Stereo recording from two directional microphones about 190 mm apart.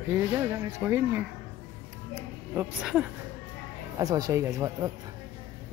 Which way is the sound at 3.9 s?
20° right (ahead or behind).